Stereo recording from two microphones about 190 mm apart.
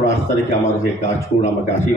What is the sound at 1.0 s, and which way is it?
Speech, 40° left (ahead or behind).